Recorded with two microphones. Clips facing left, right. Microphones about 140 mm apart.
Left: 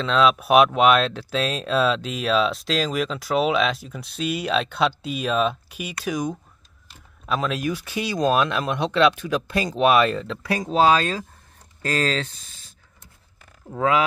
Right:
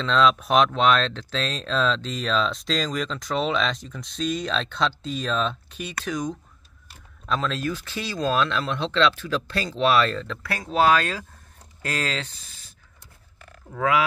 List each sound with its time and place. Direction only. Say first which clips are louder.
0.0 s speech: left 1 dB; 5° left (ahead or behind); by 11.2 s 25° left (ahead or behind)
11.8 s speech: left 5 dB; 35° left (ahead or behind)
13.7 s speech: left 2 dB; 25° left (ahead or behind)